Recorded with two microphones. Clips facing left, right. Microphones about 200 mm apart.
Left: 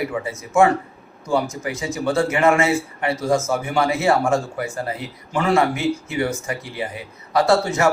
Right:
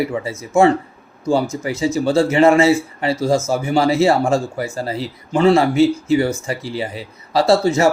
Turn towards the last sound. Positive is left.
turn(degrees=-25)  # may be behind; listen again after turning